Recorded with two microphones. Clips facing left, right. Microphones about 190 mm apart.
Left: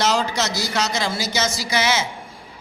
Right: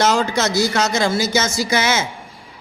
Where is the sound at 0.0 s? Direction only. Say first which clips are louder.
Right 4 dB; 50° right (ahead or behind).